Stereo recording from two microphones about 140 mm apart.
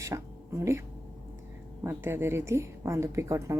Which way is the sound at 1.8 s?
15° right (ahead or behind).